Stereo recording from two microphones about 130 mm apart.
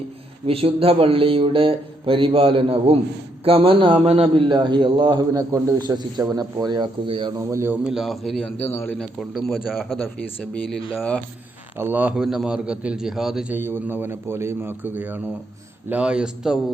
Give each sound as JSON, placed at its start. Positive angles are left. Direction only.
{"t": 0.4, "sound": "mantra", "side_deg": -45}
{"t": 3.4, "sound": "a man's voice", "side_deg": -45}
{"t": 7.3, "sound": "a man's voice", "side_deg": -20}
{"t": 7.9, "sound": "speech", "side_deg": 0}
{"t": 9.0, "sound": "speech", "side_deg": 0}
{"t": 11.8, "sound": "a man's voice", "side_deg": -15}
{"t": 13.5, "sound": "a man's voice", "side_deg": -15}